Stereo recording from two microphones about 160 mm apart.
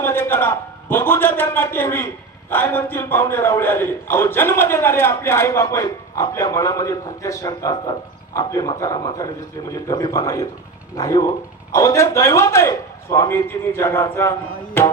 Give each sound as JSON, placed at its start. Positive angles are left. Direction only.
{"t": 0.0, "sound": "a man's voice", "side_deg": 15}